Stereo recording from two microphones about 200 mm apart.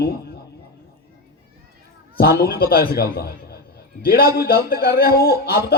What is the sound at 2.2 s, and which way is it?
A man's voice, 50° left (ahead or behind).